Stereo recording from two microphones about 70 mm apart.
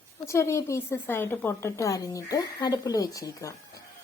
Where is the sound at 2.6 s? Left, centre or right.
Left.